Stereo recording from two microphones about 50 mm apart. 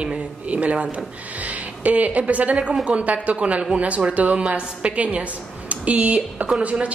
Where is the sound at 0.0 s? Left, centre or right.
Right.